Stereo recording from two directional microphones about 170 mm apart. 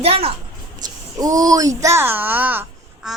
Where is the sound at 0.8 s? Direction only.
20° right (ahead or behind).